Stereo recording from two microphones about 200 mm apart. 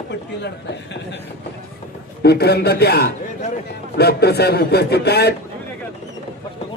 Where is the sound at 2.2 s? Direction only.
55° left (ahead or behind).